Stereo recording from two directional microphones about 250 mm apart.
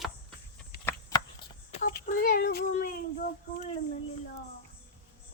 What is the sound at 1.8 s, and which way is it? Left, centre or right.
Child singing, left.